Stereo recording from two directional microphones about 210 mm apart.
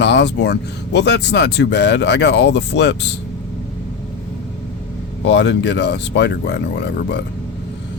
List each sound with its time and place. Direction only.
0.0 s speech: 55° left (ahead or behind)
5.2 s speech: 55° left (ahead or behind)